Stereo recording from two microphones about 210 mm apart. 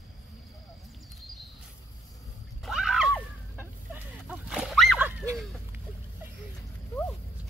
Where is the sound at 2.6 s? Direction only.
Centre (ahead or behind).